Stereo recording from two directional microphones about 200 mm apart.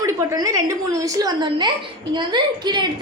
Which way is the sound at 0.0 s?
15° right (ahead or behind).